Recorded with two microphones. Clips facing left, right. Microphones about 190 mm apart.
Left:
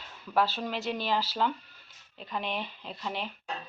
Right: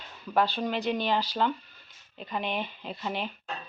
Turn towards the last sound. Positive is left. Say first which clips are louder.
# right 3 dB
turn(degrees=0)  # may be behind; listen again after turning